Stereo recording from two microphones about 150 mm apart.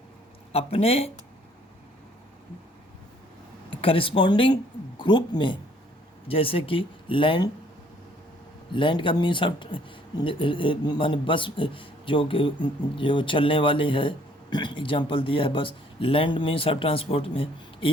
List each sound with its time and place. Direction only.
0.5 s speech: 40° left (ahead or behind)
3.8 s speech: 35° left (ahead or behind)
8.7 s speech: 35° left (ahead or behind)